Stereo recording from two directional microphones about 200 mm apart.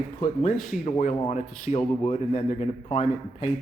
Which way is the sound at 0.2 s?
40° left (ahead or behind).